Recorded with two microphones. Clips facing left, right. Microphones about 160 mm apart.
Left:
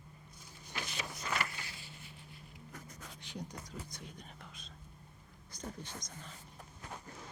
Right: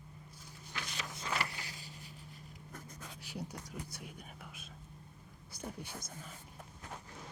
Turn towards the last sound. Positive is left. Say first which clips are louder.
# right 1 dB
turn(degrees=-5)  # may be behind; listen again after turning